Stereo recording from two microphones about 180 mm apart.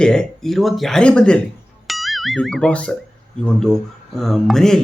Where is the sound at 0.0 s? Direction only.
5° left (ahead or behind).